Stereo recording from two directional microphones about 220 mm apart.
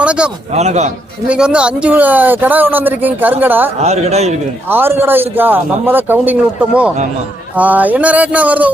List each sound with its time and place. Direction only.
0.0 s a sound: 5° right (ahead or behind)
0.5 s a man's voice: 30° right (ahead or behind)
1.3 s a man's voice: 5° right (ahead or behind)
3.8 s speech: 30° right (ahead or behind)
4.7 s a man's voice: 10° right (ahead or behind)